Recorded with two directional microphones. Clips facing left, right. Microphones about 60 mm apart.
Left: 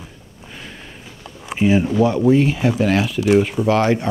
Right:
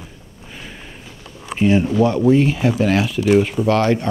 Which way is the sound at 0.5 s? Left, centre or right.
Centre.